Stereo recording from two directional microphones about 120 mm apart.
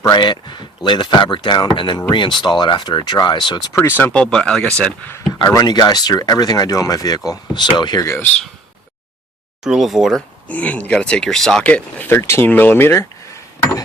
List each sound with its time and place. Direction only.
0.1 s speech: 40° left (ahead or behind)
3.8 s speech: 15° left (ahead or behind)
5.5 s speech: 30° left (ahead or behind)
9.6 s speech: 5° right (ahead or behind)
10.5 s speech: 10° left (ahead or behind)